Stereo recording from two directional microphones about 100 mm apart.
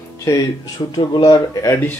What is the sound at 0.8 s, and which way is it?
Speech, 45° left (ahead or behind).